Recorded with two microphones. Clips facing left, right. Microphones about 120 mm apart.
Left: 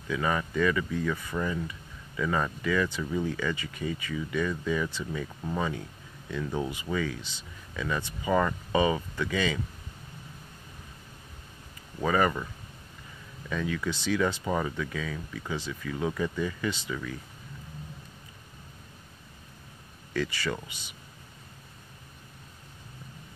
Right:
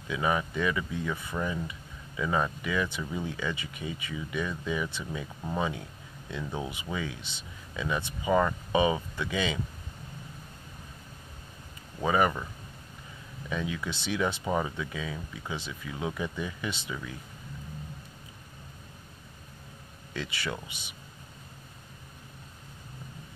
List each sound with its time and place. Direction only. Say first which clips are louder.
0.1 s speech: even; 10° right (ahead or behind)
12.0 s speech: even; 15° right (ahead or behind)
13.5 s speech: left 2 dB; 15° right (ahead or behind)